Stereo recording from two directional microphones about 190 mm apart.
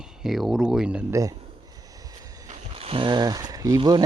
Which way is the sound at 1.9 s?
20° right (ahead or behind).